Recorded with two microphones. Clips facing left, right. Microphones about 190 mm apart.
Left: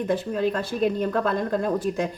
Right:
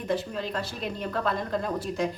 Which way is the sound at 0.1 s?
50° left (ahead or behind).